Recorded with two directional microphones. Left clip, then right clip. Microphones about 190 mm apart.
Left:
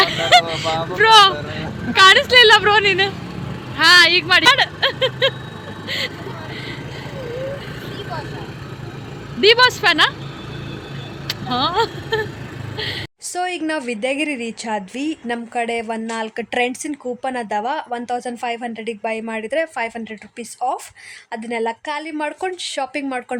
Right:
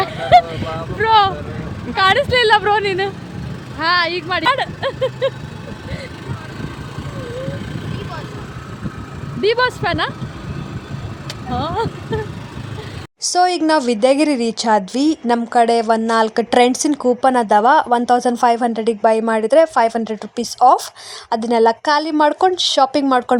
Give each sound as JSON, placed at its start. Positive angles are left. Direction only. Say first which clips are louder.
{"t": 0.0, "sound": "a sound", "louder": "right 1 dB", "side_deg": -10}
{"t": 0.9, "sound": "vehicle", "louder": "left 3 dB", "side_deg": -15}
{"t": 2.0, "sound": "speech", "louder": "left 4 dB", "side_deg": -15}
{"t": 9.4, "sound": "speech", "louder": "left 4 dB", "side_deg": -10}
{"t": 11.3, "sound": "speech", "louder": "left 3 dB", "side_deg": -10}
{"t": 13.3, "sound": "speech", "louder": "right 8 dB", "side_deg": -25}